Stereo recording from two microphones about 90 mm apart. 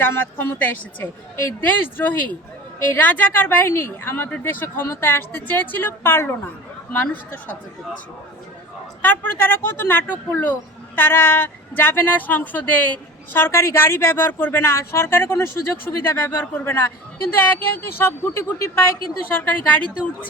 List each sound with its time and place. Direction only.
0.0 s speech: 25° left (ahead or behind)
9.0 s speech: 20° left (ahead or behind)